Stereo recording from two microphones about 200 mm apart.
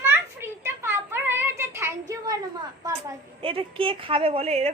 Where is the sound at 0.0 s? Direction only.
10° right (ahead or behind).